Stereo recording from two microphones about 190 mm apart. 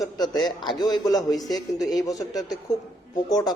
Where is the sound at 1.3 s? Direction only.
Centre (ahead or behind).